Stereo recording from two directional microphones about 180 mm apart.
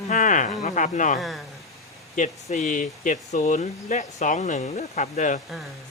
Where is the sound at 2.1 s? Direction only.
40° left (ahead or behind).